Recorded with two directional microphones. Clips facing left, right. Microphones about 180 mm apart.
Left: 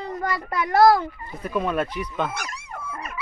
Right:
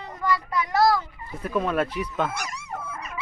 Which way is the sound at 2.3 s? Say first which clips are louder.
Even; 55° left (ahead or behind).